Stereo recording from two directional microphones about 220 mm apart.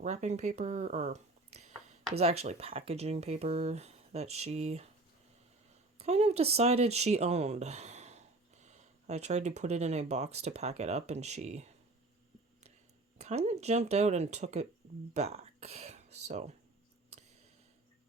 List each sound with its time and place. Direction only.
0.0 s speech: 30° right (ahead or behind)
6.0 s speech: 30° right (ahead or behind)
13.1 s speech: 30° right (ahead or behind)
17.1 s a sound: 30° right (ahead or behind)